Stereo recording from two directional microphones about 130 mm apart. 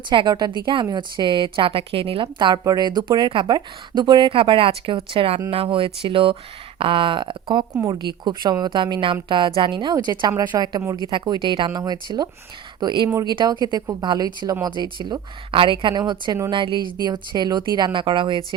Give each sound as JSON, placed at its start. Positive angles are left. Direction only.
{"t": 0.1, "sound": "speech", "side_deg": -35}
{"t": 2.2, "sound": "speech", "side_deg": -35}